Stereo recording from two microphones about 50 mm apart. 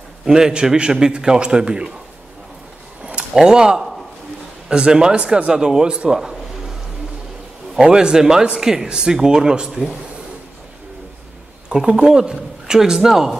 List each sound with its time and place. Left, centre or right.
0.2 s speech: centre
3.3 s speech: centre
6.1 s a sound: centre
7.7 s speech: centre
11.7 s speech: centre